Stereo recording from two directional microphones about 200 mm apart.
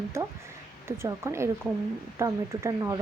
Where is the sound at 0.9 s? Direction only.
15° right (ahead or behind).